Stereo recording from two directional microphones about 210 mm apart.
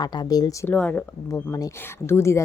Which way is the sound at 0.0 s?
20° left (ahead or behind).